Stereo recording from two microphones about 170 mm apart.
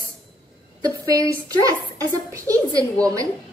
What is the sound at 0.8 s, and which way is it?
A woman's voice, 20° right (ahead or behind).